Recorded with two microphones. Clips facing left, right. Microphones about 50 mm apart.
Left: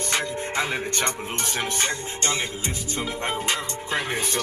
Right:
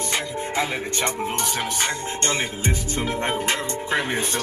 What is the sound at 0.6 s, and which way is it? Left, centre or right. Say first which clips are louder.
Speech: right 1 dB; left.